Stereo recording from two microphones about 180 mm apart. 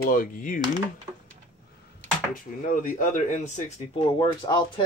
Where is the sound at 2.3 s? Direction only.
50° left (ahead or behind).